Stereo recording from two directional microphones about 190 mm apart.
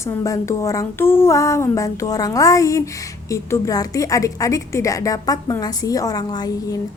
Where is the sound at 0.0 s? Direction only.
15° left (ahead or behind).